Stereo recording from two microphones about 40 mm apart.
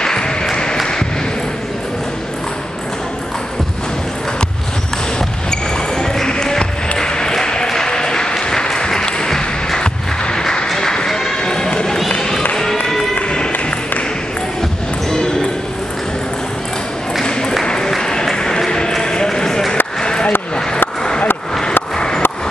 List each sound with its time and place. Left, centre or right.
0.0 s applause: centre
5.5 s basketball bounce: centre
7.0 s applause: centre
10.7 s a sound: centre
12.2 s music: centre
17.2 s ping: centre
17.6 s applause: centre
17.9 s run: centre
20.0 s a sound: left
21.9 s a sound: centre